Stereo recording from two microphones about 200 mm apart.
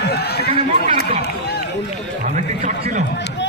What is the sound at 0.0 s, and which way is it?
Run, 55° left (ahead or behind).